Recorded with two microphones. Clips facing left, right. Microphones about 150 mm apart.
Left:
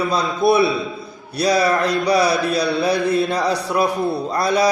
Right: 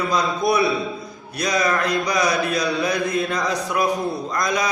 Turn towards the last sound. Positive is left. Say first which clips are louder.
# left 5 dB
turn(degrees=30)  # may be behind; listen again after turning